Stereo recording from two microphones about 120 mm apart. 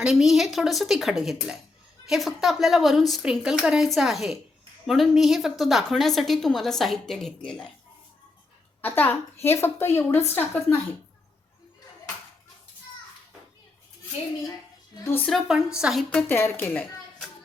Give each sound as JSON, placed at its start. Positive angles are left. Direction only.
{"t": 0.0, "sound": "a woman's voice", "side_deg": -5}
{"t": 8.8, "sound": "a woman's voice", "side_deg": 15}
{"t": 15.3, "sound": "a woman's voice", "side_deg": -5}
{"t": 16.0, "sound": "a child's voice", "side_deg": 15}